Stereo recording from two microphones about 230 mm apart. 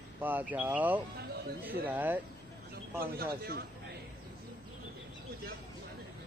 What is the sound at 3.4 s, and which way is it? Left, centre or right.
Speech, right.